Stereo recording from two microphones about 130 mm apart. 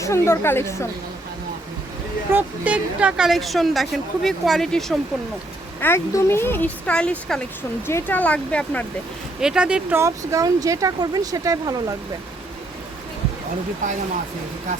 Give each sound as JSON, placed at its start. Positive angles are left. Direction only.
{"t": 0.0, "sound": "a woman's voice", "side_deg": 20}
{"t": 2.3, "sound": "a woman's voice", "side_deg": -10}
{"t": 5.8, "sound": "speech", "side_deg": 20}
{"t": 9.4, "sound": "speech", "side_deg": -5}
{"t": 10.0, "sound": "speech", "side_deg": -25}